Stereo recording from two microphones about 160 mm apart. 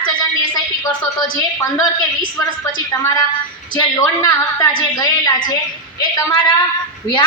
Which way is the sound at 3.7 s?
25° left (ahead or behind).